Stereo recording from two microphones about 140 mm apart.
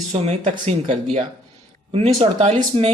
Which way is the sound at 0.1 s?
55° right (ahead or behind).